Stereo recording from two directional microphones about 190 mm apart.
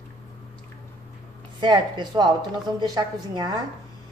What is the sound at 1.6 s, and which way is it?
A woman's voice, 25° right (ahead or behind).